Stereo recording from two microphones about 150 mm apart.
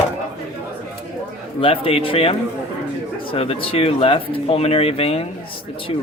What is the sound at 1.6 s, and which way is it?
Speech, 40° left (ahead or behind).